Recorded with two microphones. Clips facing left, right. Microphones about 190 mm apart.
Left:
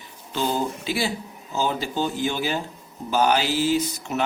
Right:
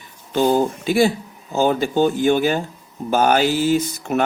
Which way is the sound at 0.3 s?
50° right (ahead or behind).